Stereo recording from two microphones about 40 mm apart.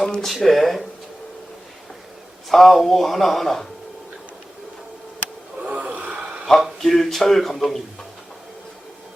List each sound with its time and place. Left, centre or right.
0.0 s speech: centre
2.5 s speech: centre
5.6 s snort: right
6.7 s speech: centre